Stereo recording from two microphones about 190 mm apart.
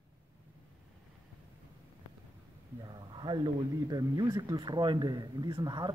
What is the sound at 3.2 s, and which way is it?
Speech, 25° right (ahead or behind).